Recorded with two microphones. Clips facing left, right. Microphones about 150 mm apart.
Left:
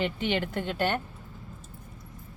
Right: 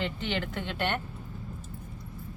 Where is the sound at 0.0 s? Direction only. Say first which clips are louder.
Left 4 dB; 15° left (ahead or behind).